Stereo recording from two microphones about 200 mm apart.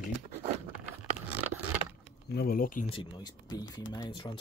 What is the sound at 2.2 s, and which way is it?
Speech, 50° left (ahead or behind).